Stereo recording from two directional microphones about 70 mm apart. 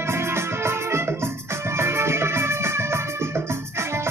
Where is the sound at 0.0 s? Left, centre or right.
Right.